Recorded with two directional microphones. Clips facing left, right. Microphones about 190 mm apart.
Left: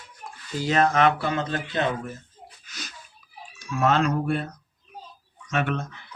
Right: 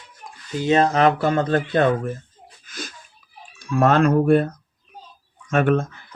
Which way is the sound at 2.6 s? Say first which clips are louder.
Right 9 dB; 50° right (ahead or behind).